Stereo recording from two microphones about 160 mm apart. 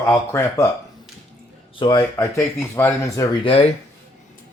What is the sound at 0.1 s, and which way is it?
Speech, 15° left (ahead or behind).